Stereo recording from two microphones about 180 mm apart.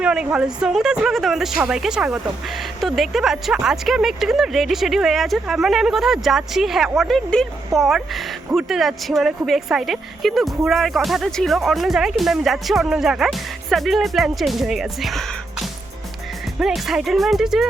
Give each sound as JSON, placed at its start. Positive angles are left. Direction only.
{"t": 0.0, "sound": "speech", "side_deg": -5}